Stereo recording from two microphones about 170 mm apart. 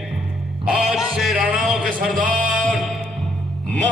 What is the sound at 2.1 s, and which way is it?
Music, 55° right (ahead or behind).